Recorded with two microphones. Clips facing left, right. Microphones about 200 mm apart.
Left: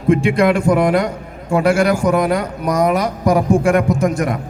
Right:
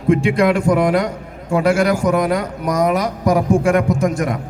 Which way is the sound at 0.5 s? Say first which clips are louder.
Left 1 dB; 25° left (ahead or behind).